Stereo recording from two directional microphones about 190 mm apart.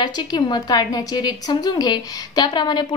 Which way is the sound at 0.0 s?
20° left (ahead or behind).